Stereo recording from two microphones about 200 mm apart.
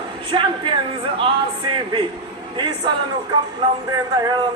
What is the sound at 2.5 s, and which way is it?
Speech, 20° right (ahead or behind).